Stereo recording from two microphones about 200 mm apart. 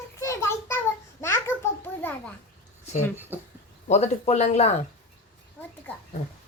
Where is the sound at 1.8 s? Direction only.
10° left (ahead or behind).